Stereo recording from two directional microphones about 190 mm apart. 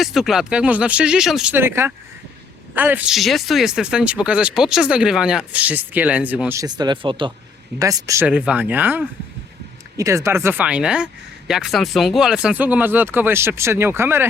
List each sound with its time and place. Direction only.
0.0 s speech: centre (ahead or behind)
6.6 s speech: 20° right (ahead or behind)